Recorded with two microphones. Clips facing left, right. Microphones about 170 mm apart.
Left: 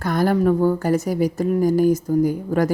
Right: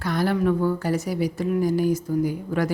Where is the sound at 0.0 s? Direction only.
45° left (ahead or behind).